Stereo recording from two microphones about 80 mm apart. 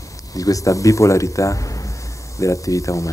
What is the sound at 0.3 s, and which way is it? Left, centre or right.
A man's voice, left.